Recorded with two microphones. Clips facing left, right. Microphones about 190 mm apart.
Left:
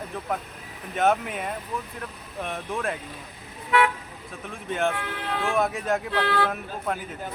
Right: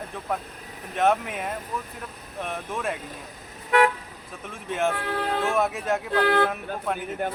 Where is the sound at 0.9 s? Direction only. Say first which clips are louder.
Even; centre (ahead or behind).